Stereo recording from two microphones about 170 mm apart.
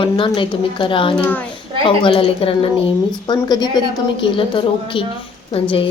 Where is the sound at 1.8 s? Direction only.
30° left (ahead or behind).